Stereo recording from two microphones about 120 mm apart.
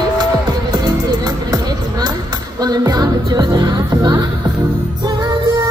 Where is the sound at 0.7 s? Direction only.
35° right (ahead or behind).